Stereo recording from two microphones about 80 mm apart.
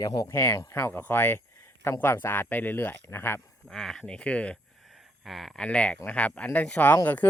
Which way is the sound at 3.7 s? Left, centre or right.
Centre.